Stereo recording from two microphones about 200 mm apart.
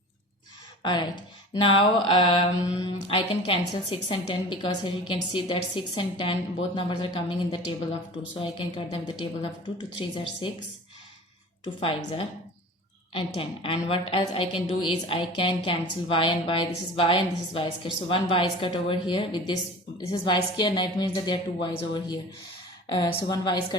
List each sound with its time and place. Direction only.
0.8 s mantra: 20° left (ahead or behind)
11.8 s mantra: 25° left (ahead or behind)